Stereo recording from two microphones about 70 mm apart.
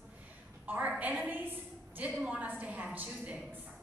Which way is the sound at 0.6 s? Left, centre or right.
Right.